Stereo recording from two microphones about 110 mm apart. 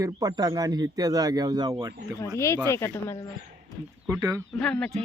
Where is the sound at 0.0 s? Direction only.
35° right (ahead or behind).